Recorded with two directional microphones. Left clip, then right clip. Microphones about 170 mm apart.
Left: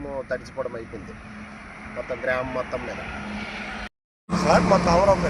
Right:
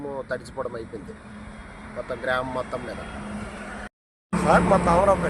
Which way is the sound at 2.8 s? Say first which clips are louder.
Left 2 dB; 90° right.